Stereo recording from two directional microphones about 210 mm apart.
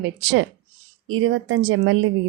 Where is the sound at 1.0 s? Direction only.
80° right.